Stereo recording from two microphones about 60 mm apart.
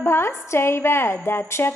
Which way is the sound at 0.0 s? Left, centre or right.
Left.